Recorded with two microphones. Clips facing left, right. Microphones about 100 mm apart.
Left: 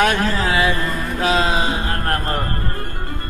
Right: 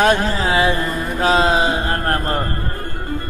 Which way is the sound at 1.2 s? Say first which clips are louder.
Right 3 dB; 40° right (ahead or behind).